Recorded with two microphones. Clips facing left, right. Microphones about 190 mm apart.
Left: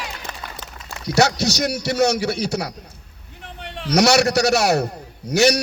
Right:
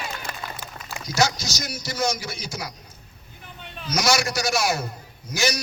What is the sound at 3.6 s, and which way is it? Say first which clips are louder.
A man's voice: left 8 dB; 80° left.